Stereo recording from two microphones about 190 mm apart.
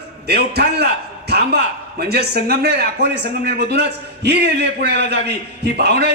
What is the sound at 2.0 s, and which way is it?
A man's voice, 60° right (ahead or behind).